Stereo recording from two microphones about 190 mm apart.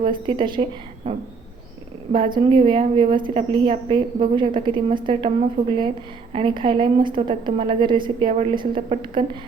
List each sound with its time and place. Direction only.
0.0 s a woman's voice: 25° right (ahead or behind)